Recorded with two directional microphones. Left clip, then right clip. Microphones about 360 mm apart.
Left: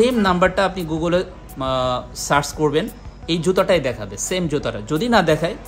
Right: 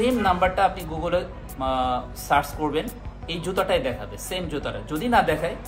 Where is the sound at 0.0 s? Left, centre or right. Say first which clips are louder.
Left 5 dB; left.